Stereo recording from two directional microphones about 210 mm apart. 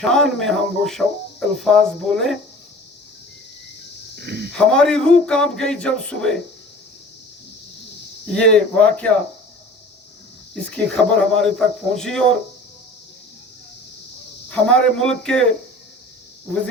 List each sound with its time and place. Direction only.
0.0 s speech: 5° left (ahead or behind)
4.2 s speech: 50° right (ahead or behind)
4.5 s speech: 5° left (ahead or behind)
8.3 s speech: 5° left (ahead or behind)
10.5 s speech: 5° left (ahead or behind)
14.5 s speech: 5° left (ahead or behind)